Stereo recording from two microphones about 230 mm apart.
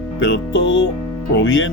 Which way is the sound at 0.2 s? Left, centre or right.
Left.